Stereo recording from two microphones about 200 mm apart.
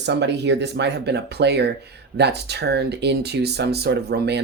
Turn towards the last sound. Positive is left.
turn(degrees=-55)  # may be behind; listen again after turning